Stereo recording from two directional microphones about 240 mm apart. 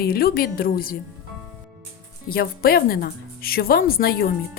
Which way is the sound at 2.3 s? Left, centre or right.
Left.